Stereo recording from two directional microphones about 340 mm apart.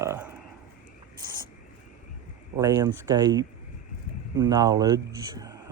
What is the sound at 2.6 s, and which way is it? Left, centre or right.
Speech, centre.